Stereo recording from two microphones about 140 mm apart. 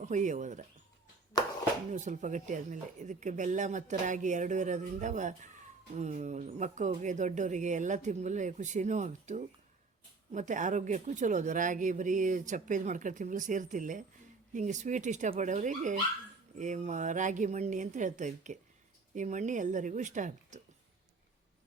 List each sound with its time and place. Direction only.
0.0 s speech: 60° right (ahead or behind)
1.9 s speech: 60° right (ahead or behind)
14.5 s speech: 60° right (ahead or behind)